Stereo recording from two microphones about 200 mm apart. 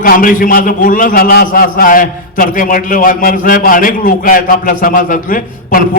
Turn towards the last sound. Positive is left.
turn(degrees=45)  # may be behind; listen again after turning